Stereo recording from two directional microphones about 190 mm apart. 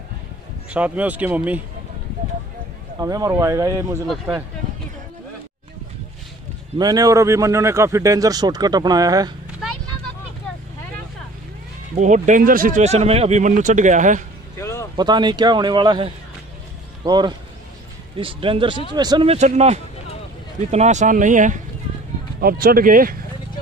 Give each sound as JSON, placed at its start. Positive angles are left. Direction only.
{"t": 0.7, "sound": "a man's voice", "side_deg": -10}
{"t": 3.0, "sound": "a man's voice", "side_deg": -20}
{"t": 6.8, "sound": "speech", "side_deg": -20}
{"t": 11.9, "sound": "speech", "side_deg": -40}
{"t": 14.6, "sound": "vehicle", "side_deg": 15}
{"t": 15.0, "sound": "speech", "side_deg": -25}
{"t": 19.3, "sound": "speech", "side_deg": -35}